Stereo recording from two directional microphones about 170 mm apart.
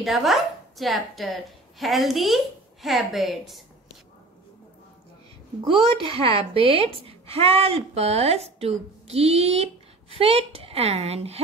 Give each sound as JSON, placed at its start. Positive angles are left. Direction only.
{"t": 0.0, "sound": "speech", "side_deg": 0}
{"t": 5.6, "sound": "a woman's voice", "side_deg": -30}